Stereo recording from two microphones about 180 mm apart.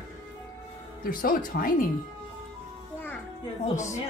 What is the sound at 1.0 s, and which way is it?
Speech, 50° left (ahead or behind).